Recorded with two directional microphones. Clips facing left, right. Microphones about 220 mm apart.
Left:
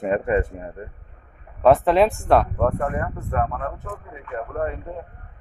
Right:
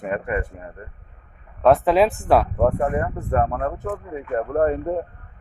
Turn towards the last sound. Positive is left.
turn(degrees=-45)  # may be behind; listen again after turning